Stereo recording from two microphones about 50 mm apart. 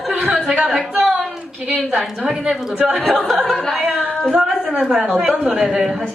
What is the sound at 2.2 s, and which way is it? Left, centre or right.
Speech, centre.